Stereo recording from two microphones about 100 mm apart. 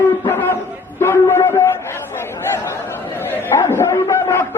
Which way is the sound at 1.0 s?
25° left (ahead or behind).